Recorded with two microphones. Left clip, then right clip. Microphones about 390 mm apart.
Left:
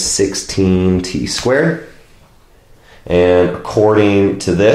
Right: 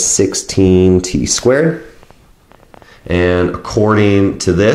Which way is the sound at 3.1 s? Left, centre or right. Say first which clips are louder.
Left 3 dB; right.